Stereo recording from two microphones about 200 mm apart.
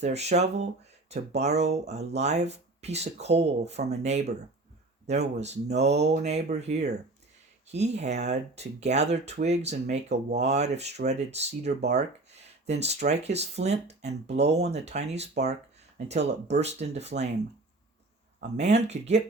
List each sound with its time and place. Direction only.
0.0 s speech: 35° right (ahead or behind)
18.3 s speech: 35° right (ahead or behind)